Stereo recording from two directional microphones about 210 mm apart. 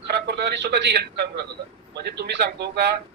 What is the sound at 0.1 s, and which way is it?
A man's voice, 50° right (ahead or behind).